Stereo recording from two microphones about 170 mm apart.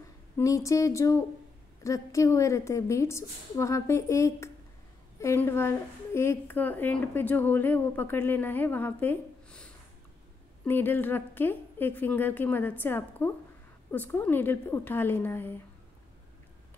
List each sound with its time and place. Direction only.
0.4 s a woman's voice: 20° left (ahead or behind)